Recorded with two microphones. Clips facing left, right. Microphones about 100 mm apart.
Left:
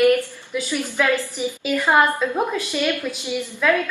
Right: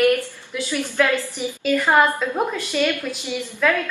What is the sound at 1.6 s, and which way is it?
A woman's voice, 10° left (ahead or behind).